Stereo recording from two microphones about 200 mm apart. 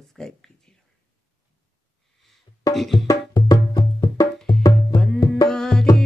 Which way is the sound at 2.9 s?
20° left (ahead or behind).